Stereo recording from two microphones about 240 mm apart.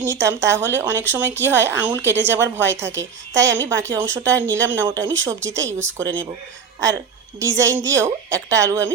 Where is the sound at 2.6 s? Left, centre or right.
Right.